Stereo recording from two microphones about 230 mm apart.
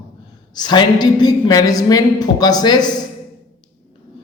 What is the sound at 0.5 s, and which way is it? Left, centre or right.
A woman's voice, centre.